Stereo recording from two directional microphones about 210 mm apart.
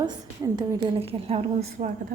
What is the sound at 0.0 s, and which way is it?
Speech, 15° right (ahead or behind).